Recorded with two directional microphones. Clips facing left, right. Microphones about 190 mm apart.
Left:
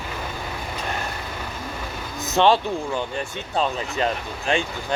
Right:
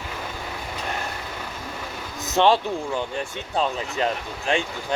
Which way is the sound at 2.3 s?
15° right (ahead or behind).